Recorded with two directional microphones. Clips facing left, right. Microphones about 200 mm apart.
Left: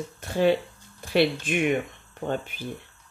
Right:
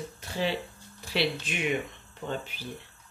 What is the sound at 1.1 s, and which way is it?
Humming, 50° left (ahead or behind).